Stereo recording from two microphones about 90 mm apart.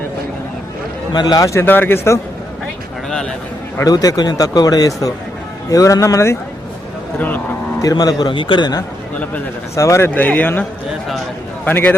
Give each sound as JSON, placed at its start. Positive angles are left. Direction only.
{"t": 1.1, "sound": "speech", "side_deg": 50}
{"t": 1.6, "sound": "a man's voice", "side_deg": 20}
{"t": 3.1, "sound": "a sound", "side_deg": 5}
{"t": 3.8, "sound": "a man's voice", "side_deg": 45}
{"t": 7.2, "sound": "a man's voice", "side_deg": 20}
{"t": 7.8, "sound": "speech", "side_deg": 45}
{"t": 8.3, "sound": "a man's voice", "side_deg": 70}
{"t": 9.7, "sound": "a man's voice", "side_deg": 35}
{"t": 10.1, "sound": "a man's voice", "side_deg": 20}